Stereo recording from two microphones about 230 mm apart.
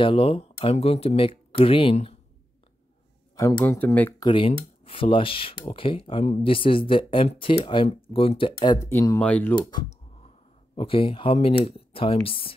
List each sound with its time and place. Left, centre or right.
0.0 s speech: left
3.3 s speech: centre
4.3 s speech: left
9.6 s computer keyboard: centre
10.8 s speech: left